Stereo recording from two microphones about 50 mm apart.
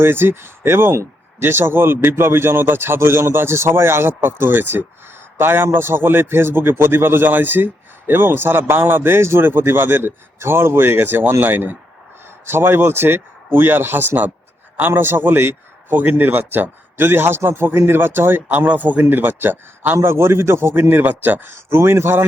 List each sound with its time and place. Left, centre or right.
0.0 s speech: right
9.5 s speech: right
18.9 s speech: right
20.0 s a man's voice: right
20.9 s speech: right
21.5 s a man's voice: right